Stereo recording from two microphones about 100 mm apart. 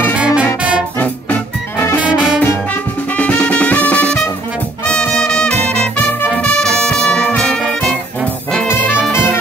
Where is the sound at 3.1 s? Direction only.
15° left (ahead or behind).